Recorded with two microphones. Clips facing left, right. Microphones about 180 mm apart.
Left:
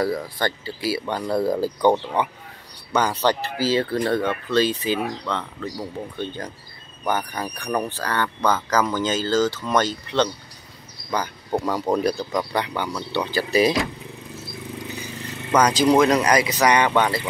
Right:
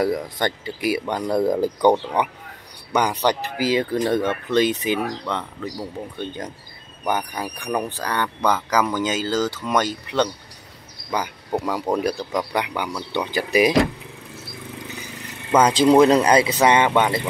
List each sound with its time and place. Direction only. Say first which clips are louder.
0.0 s speech: right 2 dB; 20° right (ahead or behind)
7.1 s speech: even; 15° right (ahead or behind)
15.5 s speech: right 2 dB; 25° right (ahead or behind)